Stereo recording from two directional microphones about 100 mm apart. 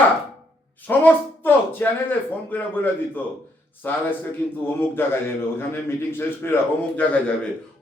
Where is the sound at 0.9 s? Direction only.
20° left (ahead or behind).